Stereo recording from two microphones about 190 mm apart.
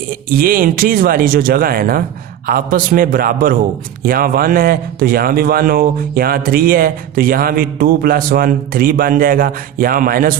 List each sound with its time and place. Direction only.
0.1 s a man's voice: 50° right (ahead or behind)